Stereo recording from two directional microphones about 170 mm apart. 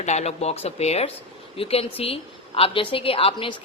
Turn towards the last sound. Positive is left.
turn(degrees=30)  # may be behind; listen again after turning